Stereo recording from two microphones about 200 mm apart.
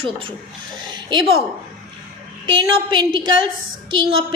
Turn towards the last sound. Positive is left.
turn(degrees=-25)  # may be behind; listen again after turning